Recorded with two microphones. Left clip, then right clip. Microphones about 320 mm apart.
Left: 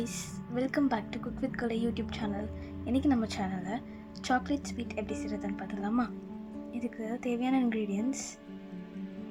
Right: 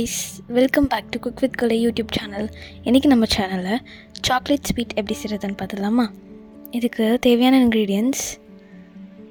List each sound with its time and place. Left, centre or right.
0.0 s a woman's voice: right